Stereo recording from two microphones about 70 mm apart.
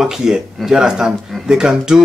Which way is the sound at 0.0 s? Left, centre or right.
Centre.